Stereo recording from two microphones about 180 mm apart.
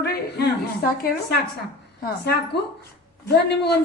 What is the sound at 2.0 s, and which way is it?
A woman's voice, 65° left (ahead or behind).